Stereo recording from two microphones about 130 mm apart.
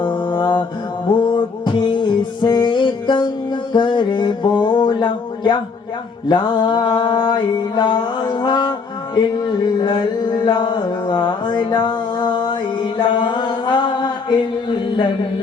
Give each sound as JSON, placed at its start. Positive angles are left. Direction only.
{"t": 0.0, "sound": "mantra", "side_deg": 40}
{"t": 1.2, "sound": "music", "side_deg": 35}
{"t": 6.2, "sound": "mantra", "side_deg": 35}
{"t": 9.7, "sound": "music", "side_deg": 35}